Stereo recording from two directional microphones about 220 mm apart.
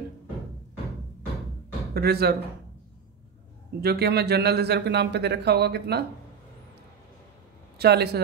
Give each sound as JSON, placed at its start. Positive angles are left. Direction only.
{"t": 2.0, "sound": "a man's voice", "side_deg": -45}
{"t": 3.8, "sound": "a man's voice", "side_deg": -45}
{"t": 7.8, "sound": "a man's voice", "side_deg": -45}